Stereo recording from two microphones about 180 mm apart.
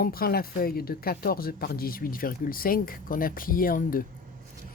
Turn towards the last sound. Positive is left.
turn(degrees=50)  # may be behind; listen again after turning